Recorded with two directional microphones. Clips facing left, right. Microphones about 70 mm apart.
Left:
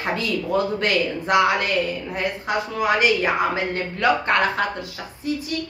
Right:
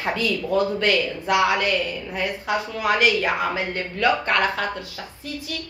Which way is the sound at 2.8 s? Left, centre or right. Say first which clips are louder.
Left 1 dB; centre.